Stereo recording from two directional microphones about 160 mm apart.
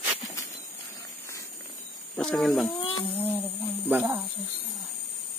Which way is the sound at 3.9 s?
10° right (ahead or behind).